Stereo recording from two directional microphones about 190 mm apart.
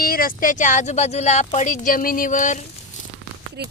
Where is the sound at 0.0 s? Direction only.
50° left (ahead or behind).